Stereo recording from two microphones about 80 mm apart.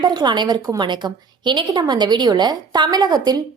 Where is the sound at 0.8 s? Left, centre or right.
Right.